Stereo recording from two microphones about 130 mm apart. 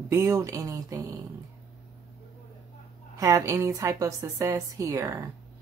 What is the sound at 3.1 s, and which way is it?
A woman's voice, 25° right (ahead or behind).